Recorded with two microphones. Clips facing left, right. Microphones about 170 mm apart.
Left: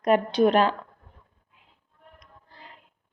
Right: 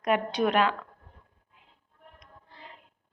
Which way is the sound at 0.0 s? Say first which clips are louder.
Left 6 dB; 30° left (ahead or behind).